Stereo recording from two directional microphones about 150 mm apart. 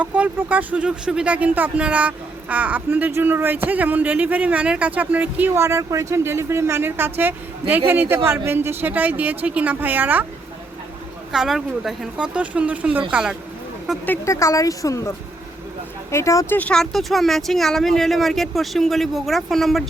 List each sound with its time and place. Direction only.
0.0 s speech: 10° right (ahead or behind)
11.3 s speech: centre (ahead or behind)
14.0 s speech: 15° left (ahead or behind)
16.1 s speech: 20° left (ahead or behind)
16.6 s speech: 5° left (ahead or behind)